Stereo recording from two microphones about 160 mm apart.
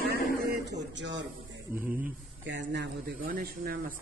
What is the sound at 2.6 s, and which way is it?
Speech, 90° right.